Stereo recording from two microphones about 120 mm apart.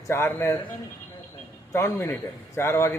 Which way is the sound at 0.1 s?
20° left (ahead or behind).